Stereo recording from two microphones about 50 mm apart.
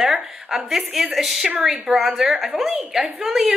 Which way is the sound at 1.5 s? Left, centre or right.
Centre.